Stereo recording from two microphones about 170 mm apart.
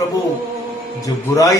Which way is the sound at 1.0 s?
20° left (ahead or behind).